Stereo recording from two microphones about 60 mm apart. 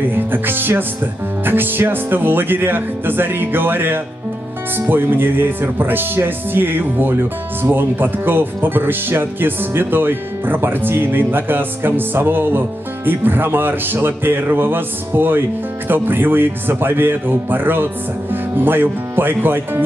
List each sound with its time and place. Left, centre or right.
0.1 s speech: right